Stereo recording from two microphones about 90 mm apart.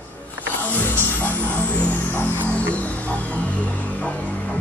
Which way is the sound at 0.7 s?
20° left (ahead or behind).